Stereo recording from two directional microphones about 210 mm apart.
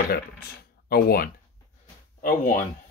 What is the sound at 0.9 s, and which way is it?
Speech, 45° left (ahead or behind).